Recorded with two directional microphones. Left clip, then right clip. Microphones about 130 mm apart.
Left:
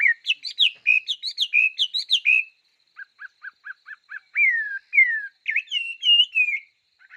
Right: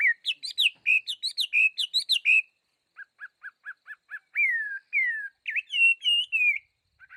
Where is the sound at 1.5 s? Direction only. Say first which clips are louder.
Left 4 dB; 75° right (ahead or behind).